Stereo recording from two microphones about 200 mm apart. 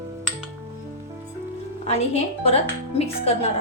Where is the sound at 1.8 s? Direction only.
30° left (ahead or behind).